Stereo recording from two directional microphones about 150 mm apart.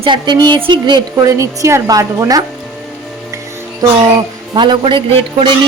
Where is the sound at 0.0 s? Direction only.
30° right (ahead or behind).